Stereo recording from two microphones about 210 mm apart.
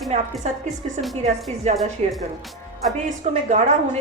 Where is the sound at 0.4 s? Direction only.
30° right (ahead or behind).